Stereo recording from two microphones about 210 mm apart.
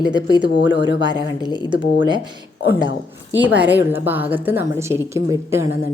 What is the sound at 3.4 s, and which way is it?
A woman's voice, 10° right (ahead or behind).